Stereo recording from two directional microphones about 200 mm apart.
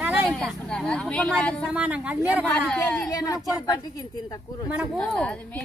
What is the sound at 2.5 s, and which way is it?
Speech, 10° left (ahead or behind).